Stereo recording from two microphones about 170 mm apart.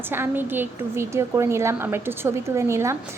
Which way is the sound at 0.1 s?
10° right (ahead or behind).